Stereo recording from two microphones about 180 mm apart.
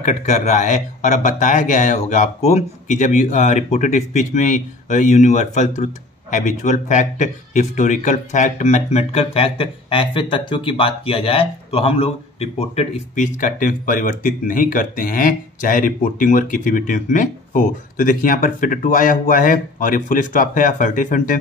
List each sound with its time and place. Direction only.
0.0 s a man's voice: 40° left (ahead or behind)